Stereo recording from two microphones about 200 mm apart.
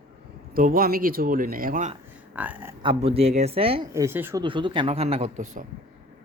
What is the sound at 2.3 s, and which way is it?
Speech, 10° right (ahead or behind).